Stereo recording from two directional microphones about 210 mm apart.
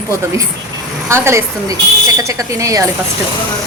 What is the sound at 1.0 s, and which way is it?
Speech, 15° right (ahead or behind).